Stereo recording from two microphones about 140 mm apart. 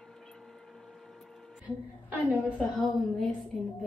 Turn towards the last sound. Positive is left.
turn(degrees=0)  # may be behind; listen again after turning